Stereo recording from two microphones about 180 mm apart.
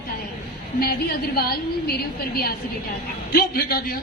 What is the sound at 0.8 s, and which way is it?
A woman's voice, 60° left (ahead or behind).